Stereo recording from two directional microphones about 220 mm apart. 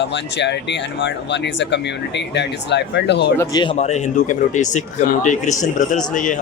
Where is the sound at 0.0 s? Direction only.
50° left (ahead or behind).